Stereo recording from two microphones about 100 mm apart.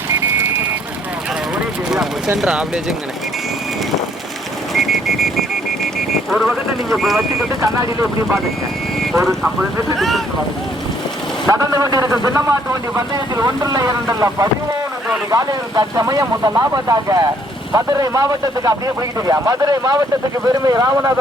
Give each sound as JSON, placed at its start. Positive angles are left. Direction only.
{"t": 1.9, "sound": "clip-clop", "side_deg": -5}
{"t": 2.4, "sound": "speech", "side_deg": -5}
{"t": 4.7, "sound": "vehicle", "side_deg": 0}
{"t": 6.3, "sound": "speech", "side_deg": 0}
{"t": 7.6, "sound": "a man's voice", "side_deg": -35}
{"t": 9.2, "sound": "speech", "side_deg": -5}
{"t": 11.4, "sound": "a man's voice", "side_deg": -35}